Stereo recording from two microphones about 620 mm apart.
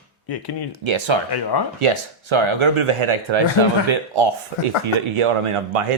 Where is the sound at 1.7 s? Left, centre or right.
Right.